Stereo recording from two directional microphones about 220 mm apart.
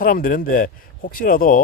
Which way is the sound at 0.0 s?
40° left (ahead or behind).